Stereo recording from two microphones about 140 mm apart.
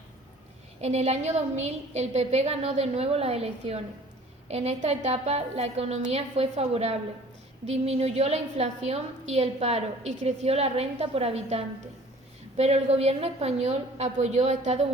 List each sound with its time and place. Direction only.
0.8 s a woman's voice: 50° right (ahead or behind)